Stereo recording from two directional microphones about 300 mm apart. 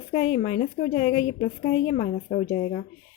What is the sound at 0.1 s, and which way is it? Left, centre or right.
A woman's voice, left.